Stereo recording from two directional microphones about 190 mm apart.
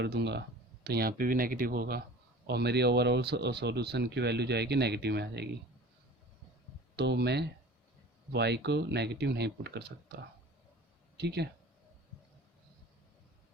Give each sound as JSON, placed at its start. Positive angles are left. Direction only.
{"t": 0.0, "sound": "speech", "side_deg": -65}
{"t": 6.9, "sound": "speech", "side_deg": -60}
{"t": 11.2, "sound": "speech", "side_deg": -60}